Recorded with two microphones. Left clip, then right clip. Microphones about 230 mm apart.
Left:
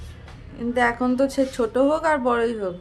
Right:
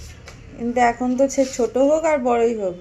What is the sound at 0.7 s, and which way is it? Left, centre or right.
A woman's voice, centre.